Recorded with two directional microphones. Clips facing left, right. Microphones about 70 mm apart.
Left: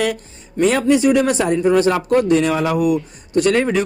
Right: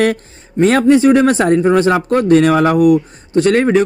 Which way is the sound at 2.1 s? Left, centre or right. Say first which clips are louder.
Right 6 dB; right.